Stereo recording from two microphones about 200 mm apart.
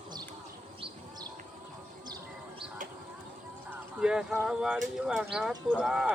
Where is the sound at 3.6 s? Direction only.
5° right (ahead or behind).